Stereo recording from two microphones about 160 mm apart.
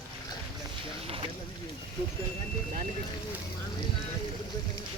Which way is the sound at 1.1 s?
35° right (ahead or behind).